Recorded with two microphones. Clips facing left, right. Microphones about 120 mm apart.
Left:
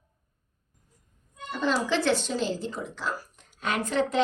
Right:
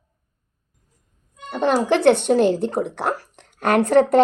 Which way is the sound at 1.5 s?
60° right (ahead or behind).